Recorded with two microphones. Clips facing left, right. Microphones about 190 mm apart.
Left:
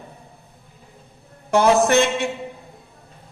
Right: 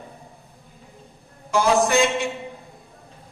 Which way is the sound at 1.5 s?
65° left (ahead or behind).